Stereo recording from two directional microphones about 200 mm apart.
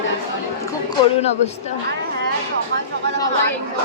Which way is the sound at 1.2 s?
35° left (ahead or behind).